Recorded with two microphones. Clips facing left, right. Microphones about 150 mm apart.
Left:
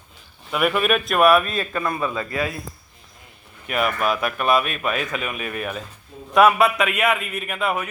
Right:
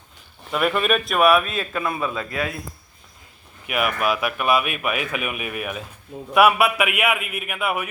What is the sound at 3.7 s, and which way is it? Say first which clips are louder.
Speech: even; 10° right (ahead or behind).